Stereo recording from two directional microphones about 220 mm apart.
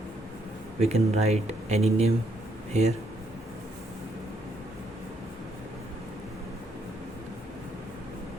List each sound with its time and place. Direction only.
0.8 s speech: 30° right (ahead or behind)